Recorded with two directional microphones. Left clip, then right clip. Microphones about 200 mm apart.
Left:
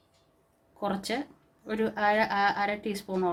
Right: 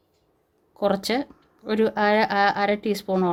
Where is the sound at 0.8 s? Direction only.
55° right (ahead or behind).